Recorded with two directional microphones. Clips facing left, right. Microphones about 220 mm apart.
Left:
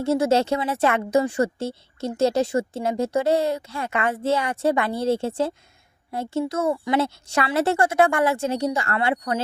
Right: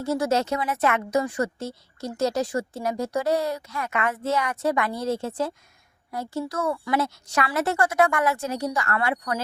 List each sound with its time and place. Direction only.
0.0 s a woman's voice: 25° left (ahead or behind)